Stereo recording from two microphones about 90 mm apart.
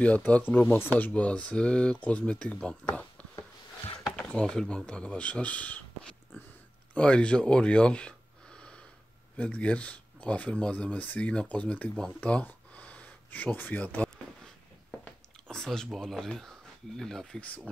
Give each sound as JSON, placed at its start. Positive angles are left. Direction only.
{"t": 0.0, "sound": "speech", "side_deg": 15}
{"t": 2.9, "sound": "a sound", "side_deg": 20}
{"t": 4.2, "sound": "speech", "side_deg": 10}
{"t": 9.4, "sound": "speech", "side_deg": 15}
{"t": 12.2, "sound": "a sound", "side_deg": 15}
{"t": 15.4, "sound": "speech", "side_deg": 5}